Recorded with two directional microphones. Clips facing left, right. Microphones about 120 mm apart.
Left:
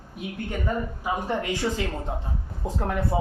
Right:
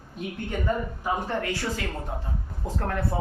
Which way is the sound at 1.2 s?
15° left (ahead or behind).